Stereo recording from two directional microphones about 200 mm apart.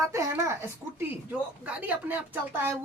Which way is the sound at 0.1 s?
15° right (ahead or behind).